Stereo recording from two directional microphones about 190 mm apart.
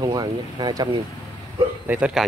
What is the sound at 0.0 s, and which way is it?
Speech, 20° right (ahead or behind).